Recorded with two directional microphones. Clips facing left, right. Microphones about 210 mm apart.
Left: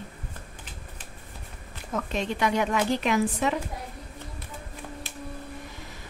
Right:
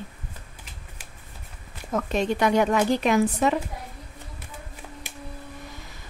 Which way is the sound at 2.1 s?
45° right (ahead or behind).